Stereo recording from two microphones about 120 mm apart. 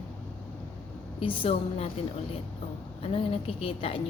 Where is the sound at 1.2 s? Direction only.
50° left (ahead or behind).